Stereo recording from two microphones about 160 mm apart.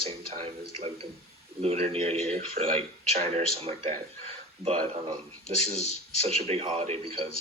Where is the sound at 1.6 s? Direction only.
40° right (ahead or behind).